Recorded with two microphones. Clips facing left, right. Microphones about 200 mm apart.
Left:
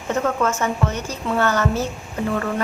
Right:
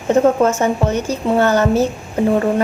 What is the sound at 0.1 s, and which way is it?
A woman's voice, 30° right (ahead or behind).